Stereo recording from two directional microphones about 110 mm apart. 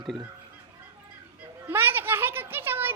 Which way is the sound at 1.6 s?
20° right (ahead or behind).